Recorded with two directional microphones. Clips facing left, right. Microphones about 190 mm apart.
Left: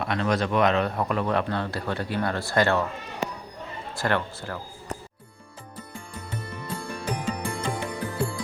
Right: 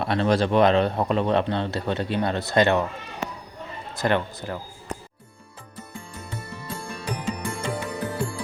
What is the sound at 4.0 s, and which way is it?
Speech, 20° right (ahead or behind).